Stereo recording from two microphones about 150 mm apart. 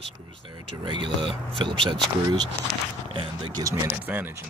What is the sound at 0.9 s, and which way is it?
Speech, 30° right (ahead or behind).